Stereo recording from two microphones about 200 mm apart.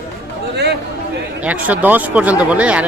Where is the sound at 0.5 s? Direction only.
55° right (ahead or behind).